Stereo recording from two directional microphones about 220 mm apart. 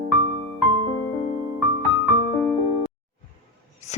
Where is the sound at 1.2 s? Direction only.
35° left (ahead or behind).